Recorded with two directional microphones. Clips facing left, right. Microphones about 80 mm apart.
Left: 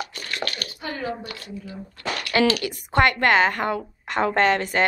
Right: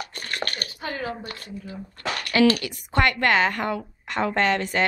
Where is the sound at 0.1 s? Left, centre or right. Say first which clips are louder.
Even; right.